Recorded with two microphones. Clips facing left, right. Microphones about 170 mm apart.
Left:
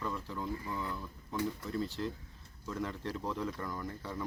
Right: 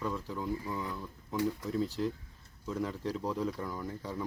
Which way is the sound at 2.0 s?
10° right (ahead or behind).